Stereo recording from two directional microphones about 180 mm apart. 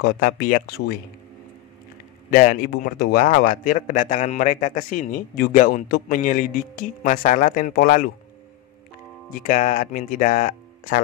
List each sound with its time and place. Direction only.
0.0 s speech: 55° left (ahead or behind)
2.3 s a man's voice: 50° left (ahead or behind)
9.5 s a man's voice: 40° left (ahead or behind)